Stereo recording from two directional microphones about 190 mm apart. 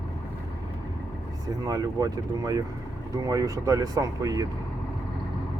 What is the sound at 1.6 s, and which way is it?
Speech, 20° right (ahead or behind).